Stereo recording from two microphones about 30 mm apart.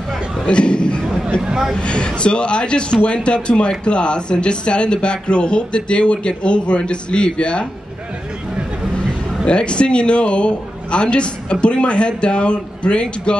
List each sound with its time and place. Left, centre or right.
0.5 s speech: left
9.5 s speech: left